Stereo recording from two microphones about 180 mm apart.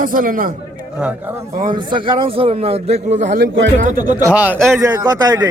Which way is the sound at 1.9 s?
30° right (ahead or behind).